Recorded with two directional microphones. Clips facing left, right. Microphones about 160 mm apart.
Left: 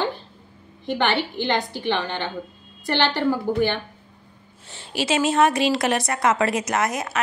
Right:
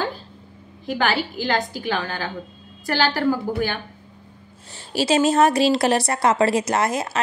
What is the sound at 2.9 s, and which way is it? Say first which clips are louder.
Speech: right 1 dB; 5° right (ahead or behind).